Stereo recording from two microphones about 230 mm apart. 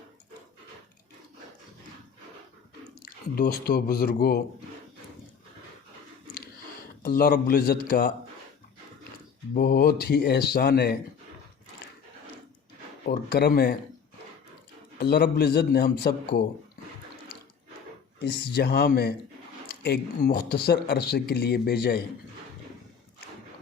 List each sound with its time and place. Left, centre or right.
3.0 s speech: left
7.0 s speech: left
9.6 s speech: left
13.1 s speech: left
14.9 s speech: left
18.2 s speech: left